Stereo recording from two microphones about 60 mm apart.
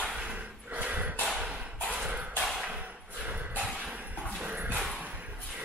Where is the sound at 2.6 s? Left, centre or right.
Right.